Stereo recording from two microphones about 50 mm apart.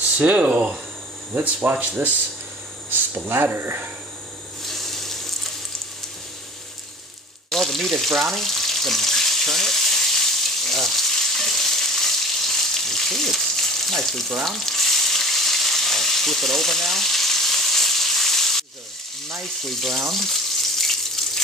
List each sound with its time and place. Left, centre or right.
0.0 s speech: right
4.6 s frying: centre
7.5 s frying: centre
19.2 s water tap: centre